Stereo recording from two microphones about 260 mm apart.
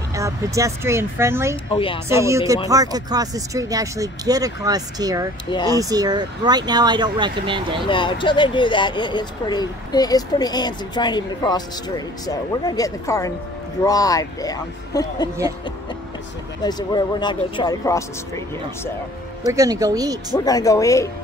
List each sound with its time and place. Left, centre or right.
0.1 s speech: centre
1.7 s a woman's voice: centre
2.0 s speech: centre
7.9 s speech: centre
16.6 s speech: centre
19.4 s speech: centre
20.3 s speech: centre